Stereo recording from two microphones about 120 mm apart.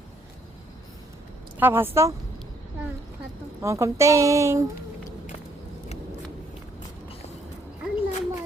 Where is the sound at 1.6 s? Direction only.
20° right (ahead or behind).